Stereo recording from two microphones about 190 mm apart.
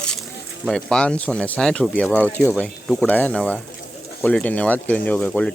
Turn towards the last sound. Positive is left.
turn(degrees=5)  # may be behind; listen again after turning